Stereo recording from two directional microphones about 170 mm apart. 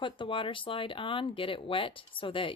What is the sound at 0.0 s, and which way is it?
Speech, 30° left (ahead or behind).